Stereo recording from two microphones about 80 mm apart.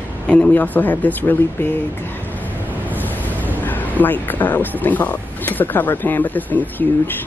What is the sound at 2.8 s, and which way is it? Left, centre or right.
Speech, left.